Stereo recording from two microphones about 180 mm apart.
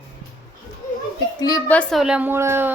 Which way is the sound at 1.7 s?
Centre (ahead or behind).